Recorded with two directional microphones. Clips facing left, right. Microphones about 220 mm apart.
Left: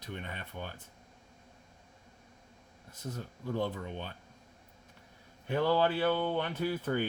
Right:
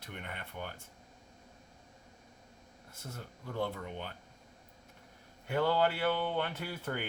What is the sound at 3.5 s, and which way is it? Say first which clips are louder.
Speech: left 1 dB; 15° left (ahead or behind).